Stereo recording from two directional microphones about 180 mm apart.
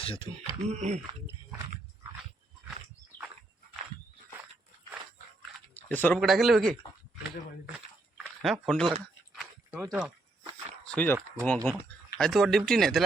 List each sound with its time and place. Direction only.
0.0 s speech: 30° left (ahead or behind)
0.7 s speech: 40° right (ahead or behind)
5.9 s speech: 10° left (ahead or behind)
6.1 s speech: centre (ahead or behind)
8.2 s speech: centre (ahead or behind)
9.7 s speech: 10° right (ahead or behind)
10.8 s speech: 10° left (ahead or behind)